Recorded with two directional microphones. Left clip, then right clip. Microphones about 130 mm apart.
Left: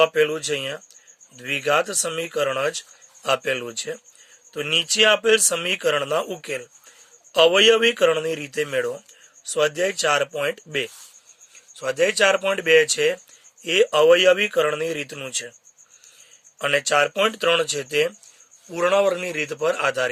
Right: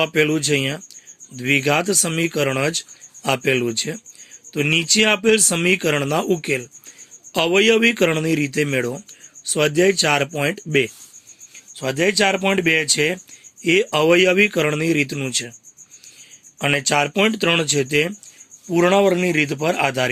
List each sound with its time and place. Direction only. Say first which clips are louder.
0.0 s speech: even; 15° right (ahead or behind)
16.6 s speech: right 1 dB; 20° right (ahead or behind)